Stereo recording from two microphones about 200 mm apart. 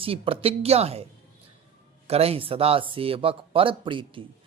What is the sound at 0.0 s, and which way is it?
Speech, 30° right (ahead or behind).